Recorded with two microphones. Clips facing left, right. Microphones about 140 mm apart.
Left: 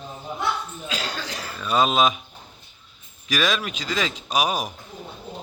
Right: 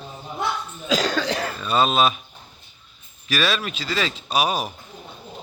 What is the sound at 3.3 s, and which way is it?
A man's voice, 15° left (ahead or behind).